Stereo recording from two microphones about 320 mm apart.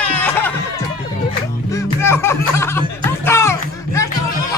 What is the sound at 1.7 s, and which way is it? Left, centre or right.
Music, centre.